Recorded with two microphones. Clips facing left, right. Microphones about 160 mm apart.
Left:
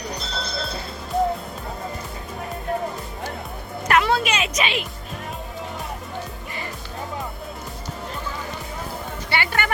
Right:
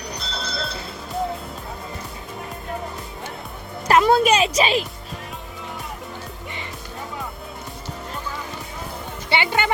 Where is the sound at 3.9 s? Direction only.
40° right (ahead or behind).